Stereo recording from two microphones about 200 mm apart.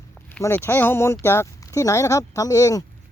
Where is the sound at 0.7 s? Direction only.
10° left (ahead or behind).